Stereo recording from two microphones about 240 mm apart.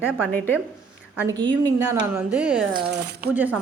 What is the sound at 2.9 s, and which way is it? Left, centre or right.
Speech, right.